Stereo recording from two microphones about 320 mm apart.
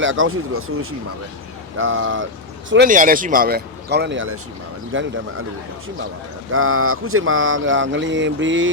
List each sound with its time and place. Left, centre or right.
0.0 s speech: right
6.5 s speech: right